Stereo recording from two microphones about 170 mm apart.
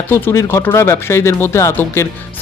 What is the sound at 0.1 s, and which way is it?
Speech, 15° left (ahead or behind).